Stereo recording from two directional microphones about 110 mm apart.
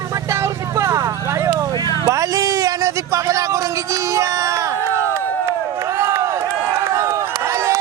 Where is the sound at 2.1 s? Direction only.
30° right (ahead or behind).